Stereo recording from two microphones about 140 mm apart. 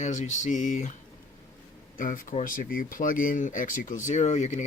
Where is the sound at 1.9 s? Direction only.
75° left (ahead or behind); by 4.6 s 55° left (ahead or behind).